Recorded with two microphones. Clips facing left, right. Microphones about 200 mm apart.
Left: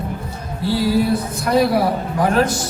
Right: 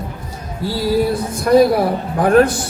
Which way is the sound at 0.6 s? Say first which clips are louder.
Even; 45° right (ahead or behind).